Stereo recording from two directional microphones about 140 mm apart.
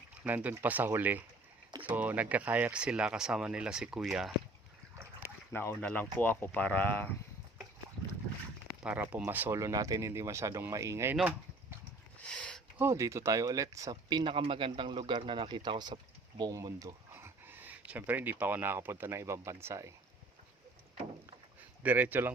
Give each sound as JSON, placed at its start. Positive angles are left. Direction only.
{"t": 0.3, "sound": "speech", "side_deg": -10}
{"t": 5.5, "sound": "speech", "side_deg": 15}
{"t": 8.8, "sound": "speech", "side_deg": -10}
{"t": 12.1, "sound": "a sound", "side_deg": 10}
{"t": 12.8, "sound": "speech", "side_deg": -20}
{"t": 13.9, "sound": "a man's voice", "side_deg": -35}
{"t": 21.8, "sound": "speech", "side_deg": -10}